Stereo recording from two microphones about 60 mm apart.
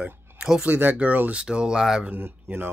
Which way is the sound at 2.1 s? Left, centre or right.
Right.